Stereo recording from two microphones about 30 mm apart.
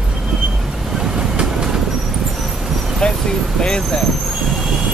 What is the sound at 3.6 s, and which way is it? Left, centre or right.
Vehicle, left.